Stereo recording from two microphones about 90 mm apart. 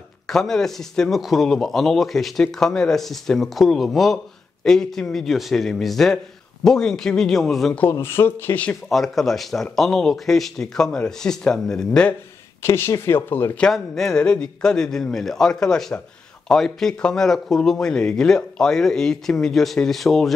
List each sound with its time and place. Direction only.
0.3 s speech: 5° left (ahead or behind)
8.0 s speech: 25° left (ahead or behind)
8.5 s a man's voice: 10° left (ahead or behind)
8.9 s speech: centre (ahead or behind)
12.6 s speech: 30° left (ahead or behind)
13.6 s a man's voice: 5° left (ahead or behind)